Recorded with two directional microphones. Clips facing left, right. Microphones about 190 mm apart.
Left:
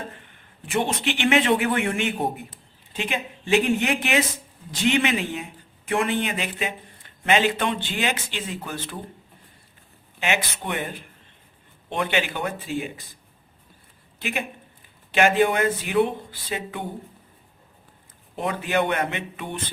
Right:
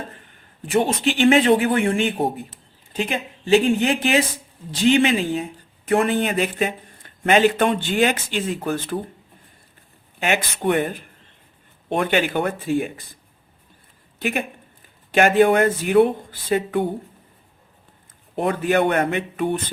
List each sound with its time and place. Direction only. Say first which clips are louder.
0.6 s a man's voice: right 5 dB; 40° right (ahead or behind)
10.2 s speech: right 3 dB; 50° right (ahead or behind)
14.2 s speech: right 5 dB; 50° right (ahead or behind)
18.3 s speech: right 5 dB; 50° right (ahead or behind)